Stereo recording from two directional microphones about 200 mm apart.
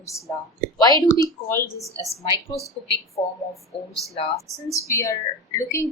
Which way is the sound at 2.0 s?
20° right (ahead or behind).